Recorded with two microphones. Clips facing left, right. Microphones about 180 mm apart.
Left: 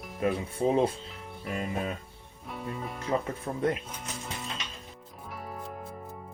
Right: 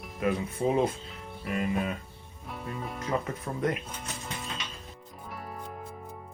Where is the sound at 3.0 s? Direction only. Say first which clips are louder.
Left 2 dB; 30° left (ahead or behind).